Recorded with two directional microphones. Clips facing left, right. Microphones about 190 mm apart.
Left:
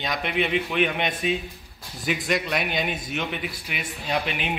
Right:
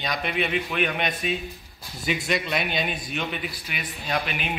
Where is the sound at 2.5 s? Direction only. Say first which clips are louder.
Left 1 dB; 15° left (ahead or behind).